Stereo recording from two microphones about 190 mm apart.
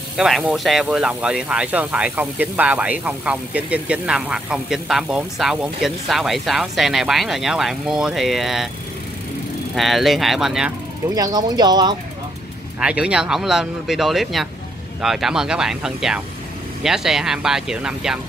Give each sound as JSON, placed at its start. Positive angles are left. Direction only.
{"t": 0.2, "sound": "speech", "side_deg": -5}
{"t": 9.8, "sound": "speech", "side_deg": 0}
{"t": 11.1, "sound": "speech", "side_deg": -20}
{"t": 12.8, "sound": "speech", "side_deg": -5}